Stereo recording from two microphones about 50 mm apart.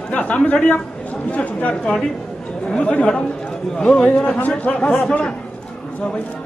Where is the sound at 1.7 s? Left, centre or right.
Centre.